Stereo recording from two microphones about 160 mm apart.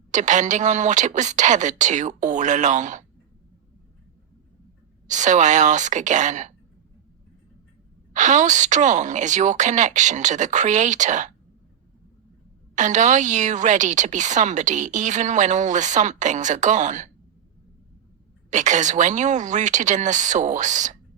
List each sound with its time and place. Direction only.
0.1 s a woman's voice: 50° right (ahead or behind)
5.0 s a woman's voice: 50° right (ahead or behind)
8.1 s a woman's voice: 50° right (ahead or behind)
12.7 s a woman's voice: 50° right (ahead or behind)
18.5 s a woman's voice: 50° right (ahead or behind)